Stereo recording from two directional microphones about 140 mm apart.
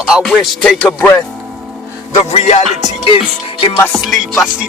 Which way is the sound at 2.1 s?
55° left (ahead or behind).